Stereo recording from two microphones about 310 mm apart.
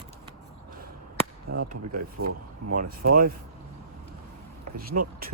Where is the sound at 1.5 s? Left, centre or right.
Right.